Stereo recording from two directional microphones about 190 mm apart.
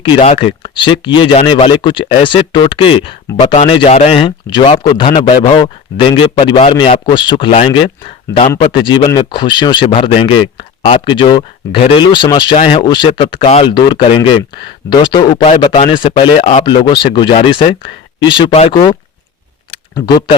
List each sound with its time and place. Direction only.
0.0 s speech: 30° left (ahead or behind)